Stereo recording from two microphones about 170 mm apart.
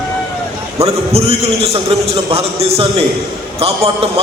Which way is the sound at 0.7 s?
35° right (ahead or behind).